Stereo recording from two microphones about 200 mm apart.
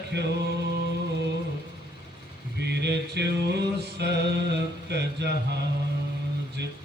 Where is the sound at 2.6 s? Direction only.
55° right (ahead or behind).